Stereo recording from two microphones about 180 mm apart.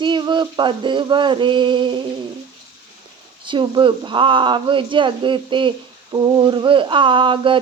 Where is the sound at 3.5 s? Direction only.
25° right (ahead or behind).